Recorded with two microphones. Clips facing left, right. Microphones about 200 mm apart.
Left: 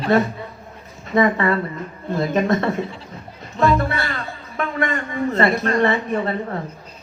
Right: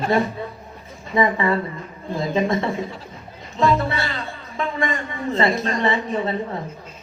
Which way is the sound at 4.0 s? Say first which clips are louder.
Left 1 dB; 55° left (ahead or behind).